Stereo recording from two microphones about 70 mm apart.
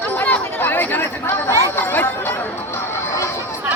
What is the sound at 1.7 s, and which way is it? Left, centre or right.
Speech, left.